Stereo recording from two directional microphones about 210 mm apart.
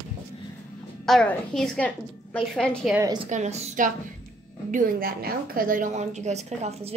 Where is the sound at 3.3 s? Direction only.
35° right (ahead or behind).